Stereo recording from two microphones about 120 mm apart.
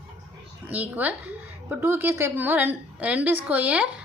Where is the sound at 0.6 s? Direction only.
15° right (ahead or behind).